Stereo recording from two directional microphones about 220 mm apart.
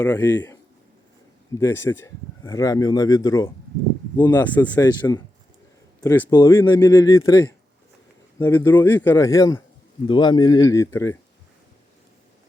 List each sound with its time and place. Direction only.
0.0 s speech: 10° left (ahead or behind)
4.8 s speech: 15° left (ahead or behind)